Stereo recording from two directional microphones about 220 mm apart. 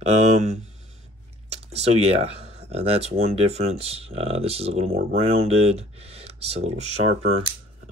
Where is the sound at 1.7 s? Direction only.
30° right (ahead or behind).